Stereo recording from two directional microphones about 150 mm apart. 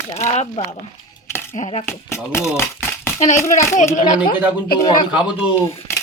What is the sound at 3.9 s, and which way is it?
Speech, 60° left (ahead or behind).